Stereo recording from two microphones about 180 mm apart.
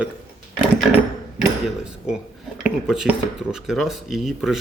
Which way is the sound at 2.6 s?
5° right (ahead or behind).